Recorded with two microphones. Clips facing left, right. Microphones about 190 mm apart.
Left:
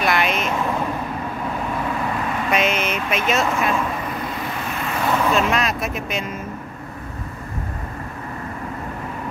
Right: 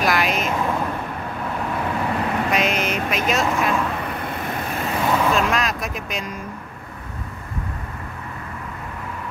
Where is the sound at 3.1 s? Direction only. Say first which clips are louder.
Left 1 dB; centre (ahead or behind).